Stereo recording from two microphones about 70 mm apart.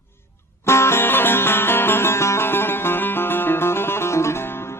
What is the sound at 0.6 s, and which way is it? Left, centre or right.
Music, left.